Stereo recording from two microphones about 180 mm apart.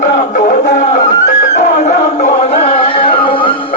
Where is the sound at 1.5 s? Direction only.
40° left (ahead or behind).